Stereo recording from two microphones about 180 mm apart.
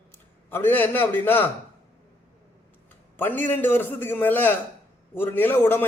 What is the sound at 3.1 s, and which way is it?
A man's voice, 10° left (ahead or behind).